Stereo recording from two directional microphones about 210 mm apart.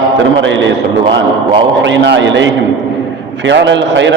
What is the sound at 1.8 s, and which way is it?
A man's voice, 60° right (ahead or behind).